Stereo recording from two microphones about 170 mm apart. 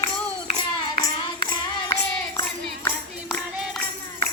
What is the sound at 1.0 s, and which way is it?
Child singing, 25° left (ahead or behind).